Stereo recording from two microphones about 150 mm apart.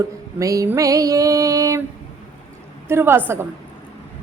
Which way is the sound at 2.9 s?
15° right (ahead or behind).